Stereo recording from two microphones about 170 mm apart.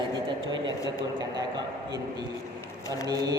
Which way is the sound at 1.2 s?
20° right (ahead or behind).